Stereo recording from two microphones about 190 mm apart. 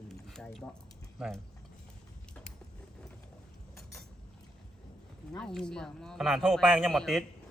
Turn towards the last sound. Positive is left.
turn(degrees=0)  # may be behind; listen again after turning